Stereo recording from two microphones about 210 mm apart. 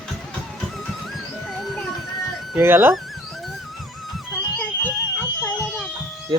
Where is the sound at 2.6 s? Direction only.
10° right (ahead or behind).